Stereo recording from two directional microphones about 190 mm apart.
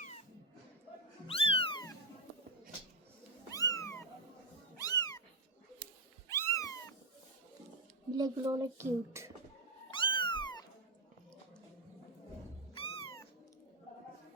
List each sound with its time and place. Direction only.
1.3 s cat: 30° left (ahead or behind)
3.5 s cat: 15° left (ahead or behind)
6.2 s cat: 15° left (ahead or behind)
8.1 s speech: 20° right (ahead or behind)
9.9 s cat: 25° left (ahead or behind)
12.7 s cat: 30° left (ahead or behind)